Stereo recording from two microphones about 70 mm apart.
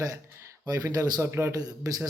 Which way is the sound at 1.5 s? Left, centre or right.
Right.